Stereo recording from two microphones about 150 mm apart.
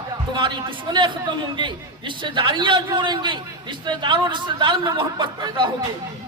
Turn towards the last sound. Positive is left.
turn(degrees=-30)  # may be behind; listen again after turning